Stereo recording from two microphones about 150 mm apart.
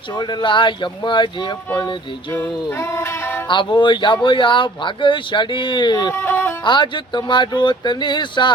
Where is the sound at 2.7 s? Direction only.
20° left (ahead or behind).